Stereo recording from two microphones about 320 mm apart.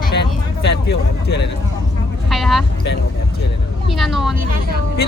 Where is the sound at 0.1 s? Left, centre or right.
Left.